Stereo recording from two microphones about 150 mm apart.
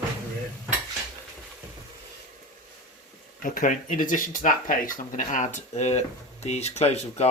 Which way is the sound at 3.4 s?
60° left (ahead or behind).